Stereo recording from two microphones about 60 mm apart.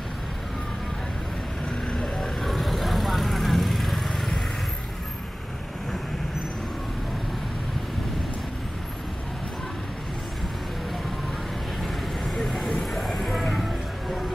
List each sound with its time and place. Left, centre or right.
1.9 s vehicle: centre
2.4 s vehicle: centre
12.4 s vehicle: centre